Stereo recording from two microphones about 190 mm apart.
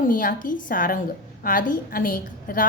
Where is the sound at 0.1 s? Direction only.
45° left (ahead or behind).